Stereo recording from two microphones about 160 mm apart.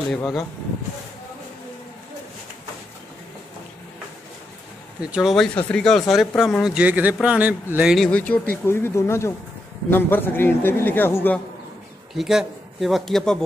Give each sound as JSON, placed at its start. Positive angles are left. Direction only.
{"t": 0.1, "sound": "speech", "side_deg": 5}
{"t": 5.1, "sound": "a man's voice", "side_deg": 0}
{"t": 12.1, "sound": "speech", "side_deg": 0}